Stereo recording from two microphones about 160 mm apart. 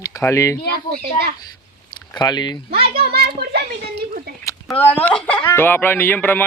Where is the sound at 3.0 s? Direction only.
80° right.